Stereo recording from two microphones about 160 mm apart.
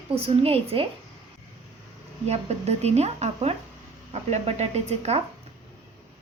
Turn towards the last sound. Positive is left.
turn(degrees=-40)  # may be behind; listen again after turning